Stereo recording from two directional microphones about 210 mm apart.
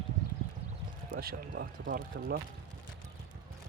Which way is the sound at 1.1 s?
50° right (ahead or behind).